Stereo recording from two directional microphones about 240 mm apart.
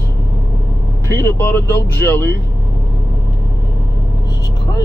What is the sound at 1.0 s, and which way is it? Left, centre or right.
Speech, centre.